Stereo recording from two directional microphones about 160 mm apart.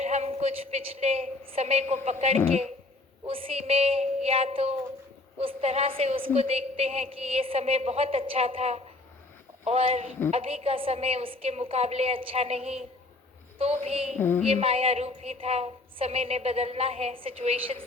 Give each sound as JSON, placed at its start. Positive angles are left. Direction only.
{"t": 0.0, "sound": "a woman's voice", "side_deg": -45}
{"t": 14.2, "sound": "a sound", "side_deg": 10}
{"t": 14.4, "sound": "a woman's voice", "side_deg": -35}